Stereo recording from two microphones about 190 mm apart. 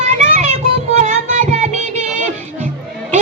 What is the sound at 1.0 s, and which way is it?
Music, 40° right (ahead or behind).